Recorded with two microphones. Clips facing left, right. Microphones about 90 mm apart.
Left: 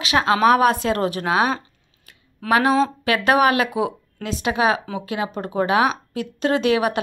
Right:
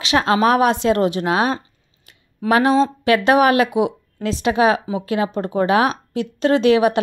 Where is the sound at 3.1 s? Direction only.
25° right (ahead or behind).